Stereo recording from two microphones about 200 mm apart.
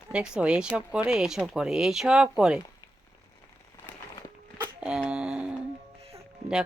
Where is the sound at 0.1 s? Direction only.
5° right (ahead or behind).